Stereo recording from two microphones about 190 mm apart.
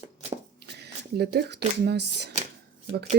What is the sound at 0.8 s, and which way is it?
Speech, 60° right (ahead or behind).